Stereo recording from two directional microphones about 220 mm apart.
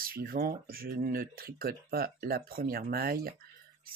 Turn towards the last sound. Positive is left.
turn(degrees=-45)  # may be behind; listen again after turning